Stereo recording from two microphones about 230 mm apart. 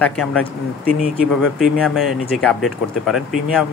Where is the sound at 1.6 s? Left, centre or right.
Centre.